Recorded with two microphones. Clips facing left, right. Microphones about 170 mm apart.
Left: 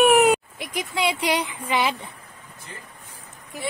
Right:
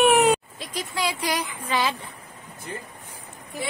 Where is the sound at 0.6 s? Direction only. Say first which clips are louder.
Left 3 dB; 20° left (ahead or behind).